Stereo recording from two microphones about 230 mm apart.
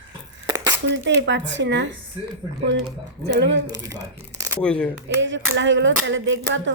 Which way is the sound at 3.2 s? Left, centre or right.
Right.